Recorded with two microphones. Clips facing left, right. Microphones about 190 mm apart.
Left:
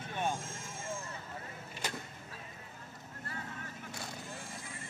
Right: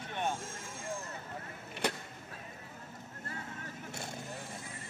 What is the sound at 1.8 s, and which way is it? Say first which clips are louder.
Vehicle: right 6 dB; 60° right (ahead or behind).